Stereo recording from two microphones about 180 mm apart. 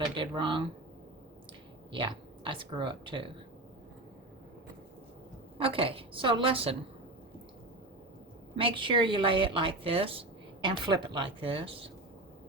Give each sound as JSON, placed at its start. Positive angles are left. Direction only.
{"t": 0.2, "sound": "a woman's voice", "side_deg": -25}
{"t": 1.9, "sound": "a woman's voice", "side_deg": -25}
{"t": 5.5, "sound": "a woman's voice", "side_deg": -30}
{"t": 8.5, "sound": "a woman's voice", "side_deg": -30}